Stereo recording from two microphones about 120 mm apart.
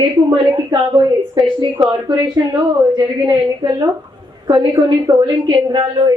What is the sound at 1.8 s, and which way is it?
Speech, 35° right (ahead or behind).